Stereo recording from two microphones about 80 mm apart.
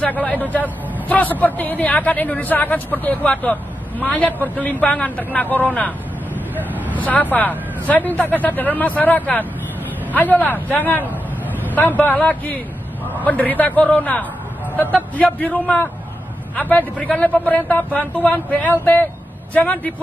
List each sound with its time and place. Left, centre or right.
0.0 s a man's voice: centre
6.5 s vehicle: right
7.0 s a man's voice: left
11.6 s vehicle: left
12.0 s a man's voice: centre